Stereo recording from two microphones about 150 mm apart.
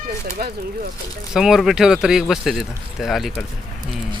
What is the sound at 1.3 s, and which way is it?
Speech, 5° right (ahead or behind).